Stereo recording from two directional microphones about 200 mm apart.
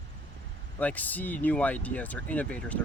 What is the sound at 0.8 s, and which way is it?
Speech, 10° left (ahead or behind).